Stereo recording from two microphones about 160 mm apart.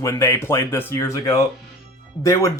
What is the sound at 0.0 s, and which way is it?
Speech, 20° left (ahead or behind).